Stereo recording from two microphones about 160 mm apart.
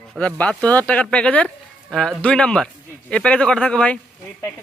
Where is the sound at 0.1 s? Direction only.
10° left (ahead or behind).